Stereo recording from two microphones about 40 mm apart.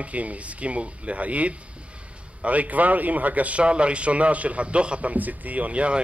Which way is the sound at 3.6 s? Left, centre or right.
Right.